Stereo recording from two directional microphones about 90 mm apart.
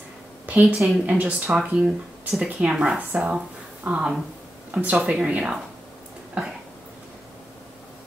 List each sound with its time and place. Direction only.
0.5 s a woman's voice: 20° right (ahead or behind)